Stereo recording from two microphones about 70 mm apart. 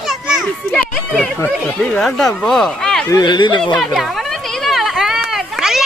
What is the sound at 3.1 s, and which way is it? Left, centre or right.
Speech, left.